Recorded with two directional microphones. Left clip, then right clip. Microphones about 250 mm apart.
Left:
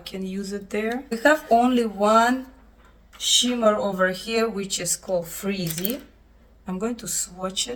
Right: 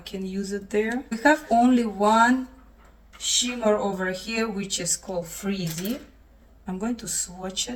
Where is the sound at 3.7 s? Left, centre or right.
Centre.